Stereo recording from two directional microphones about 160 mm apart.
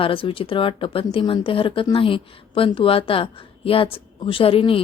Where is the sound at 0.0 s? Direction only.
35° left (ahead or behind).